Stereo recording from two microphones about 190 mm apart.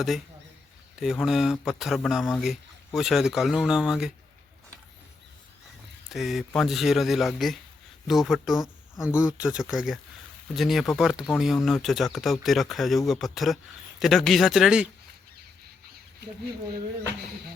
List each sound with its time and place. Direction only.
0.9 s speech: centre (ahead or behind)
6.1 s speech: centre (ahead or behind)